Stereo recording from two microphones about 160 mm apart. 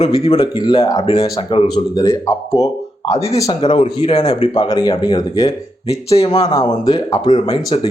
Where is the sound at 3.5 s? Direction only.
30° left (ahead or behind).